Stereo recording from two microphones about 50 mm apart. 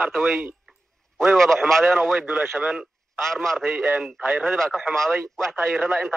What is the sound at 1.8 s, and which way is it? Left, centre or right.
Speech, right.